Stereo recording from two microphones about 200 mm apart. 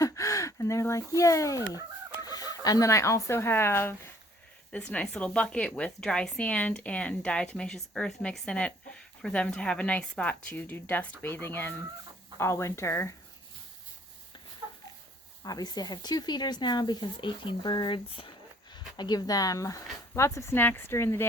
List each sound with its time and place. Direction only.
0.0 s a woman's voice: 15° left (ahead or behind)
15.4 s speech: 20° left (ahead or behind)